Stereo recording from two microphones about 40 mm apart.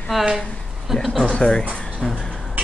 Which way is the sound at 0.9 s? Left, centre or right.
Centre.